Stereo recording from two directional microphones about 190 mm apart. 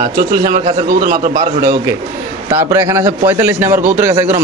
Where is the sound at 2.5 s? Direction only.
15° right (ahead or behind).